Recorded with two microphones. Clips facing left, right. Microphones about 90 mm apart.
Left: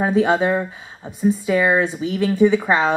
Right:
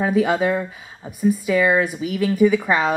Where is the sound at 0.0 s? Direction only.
30° left (ahead or behind).